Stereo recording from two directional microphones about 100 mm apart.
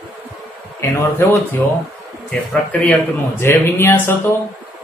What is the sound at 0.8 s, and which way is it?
Speech, 30° left (ahead or behind).